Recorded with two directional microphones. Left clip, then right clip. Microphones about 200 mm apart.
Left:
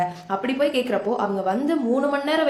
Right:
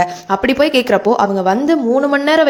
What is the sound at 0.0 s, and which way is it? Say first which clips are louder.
A woman's voice: right 9 dB; 45° right (ahead or behind).